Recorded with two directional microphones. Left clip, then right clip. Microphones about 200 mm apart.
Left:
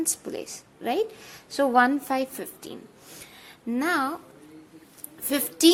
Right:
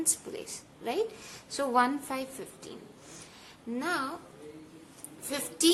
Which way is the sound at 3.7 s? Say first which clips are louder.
Left 7 dB; 45° left (ahead or behind).